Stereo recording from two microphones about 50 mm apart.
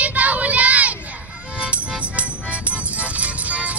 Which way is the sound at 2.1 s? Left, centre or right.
Right.